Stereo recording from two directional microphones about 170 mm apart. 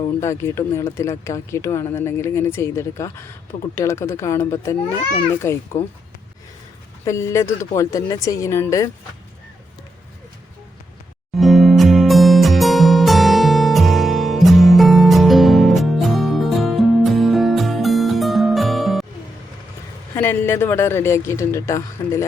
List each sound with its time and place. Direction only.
0.2 s speech: 15° left (ahead or behind)
7.0 s speech: 15° left (ahead or behind)
11.3 s music: centre (ahead or behind)
20.1 s speech: 15° left (ahead or behind)